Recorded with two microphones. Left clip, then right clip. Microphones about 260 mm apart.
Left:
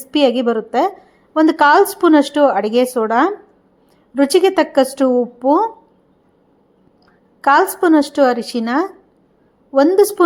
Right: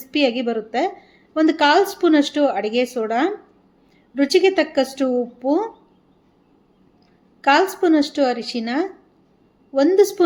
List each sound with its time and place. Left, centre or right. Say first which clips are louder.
0.1 s a woman's voice: left 5 dB; left
7.4 s a woman's voice: left 4 dB; left